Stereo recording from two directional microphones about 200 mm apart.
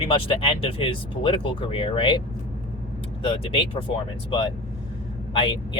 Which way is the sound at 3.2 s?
25° left (ahead or behind).